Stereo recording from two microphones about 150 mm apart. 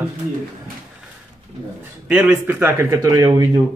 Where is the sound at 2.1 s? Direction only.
10° right (ahead or behind).